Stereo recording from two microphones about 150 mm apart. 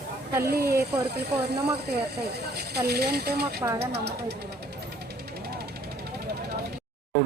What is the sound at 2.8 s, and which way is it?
Speech, 90° right.